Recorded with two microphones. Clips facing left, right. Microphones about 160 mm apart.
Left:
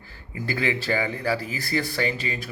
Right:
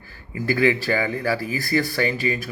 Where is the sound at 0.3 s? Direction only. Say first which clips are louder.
Right 6 dB; 25° left (ahead or behind).